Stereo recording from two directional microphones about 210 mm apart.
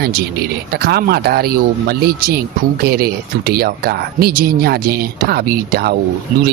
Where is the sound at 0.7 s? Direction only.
50° right (ahead or behind).